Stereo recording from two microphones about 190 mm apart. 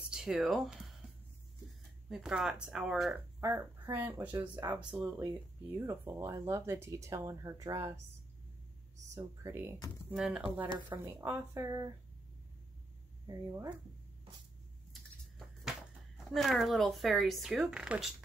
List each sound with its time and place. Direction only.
0.1 s speech: 5° right (ahead or behind)
2.0 s speech: 5° right (ahead or behind)
3.3 s speech: 15° right (ahead or behind)
5.8 s speech: 15° right (ahead or behind)
9.1 s speech: 15° right (ahead or behind)
13.3 s speech: 20° right (ahead or behind)
14.9 s a sound: centre (ahead or behind)
16.3 s speech: centre (ahead or behind)